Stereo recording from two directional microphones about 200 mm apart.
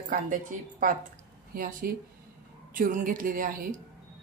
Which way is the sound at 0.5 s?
40° right (ahead or behind).